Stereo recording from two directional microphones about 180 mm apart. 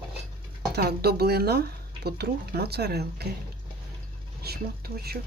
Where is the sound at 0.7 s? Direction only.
60° right (ahead or behind).